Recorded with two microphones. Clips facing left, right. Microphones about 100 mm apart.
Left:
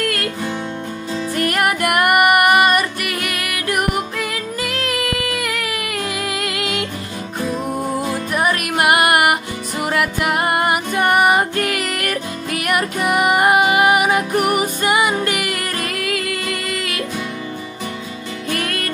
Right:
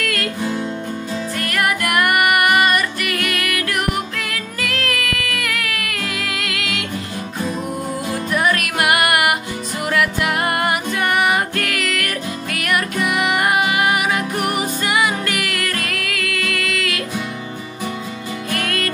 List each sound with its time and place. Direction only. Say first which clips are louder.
0.0 s music: left 2 dB; 35° left (ahead or behind)
1.4 s music: left 3 dB; 25° left (ahead or behind)
8.3 s music: right 2 dB; 25° left (ahead or behind)
13.8 s music: left 4 dB; 20° left (ahead or behind)
14.3 s music: left 4 dB; 10° left (ahead or behind)
14.8 s music: left 2 dB; 30° left (ahead or behind)